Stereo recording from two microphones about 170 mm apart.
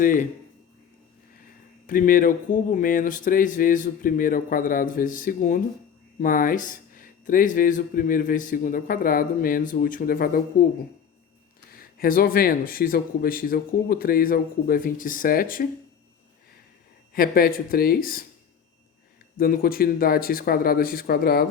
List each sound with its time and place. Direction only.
0.0 s speech: 50° left (ahead or behind)
1.9 s speech: 55° left (ahead or behind)
11.7 s speech: 60° left (ahead or behind)
17.2 s speech: 60° left (ahead or behind)
19.4 s speech: 60° left (ahead or behind)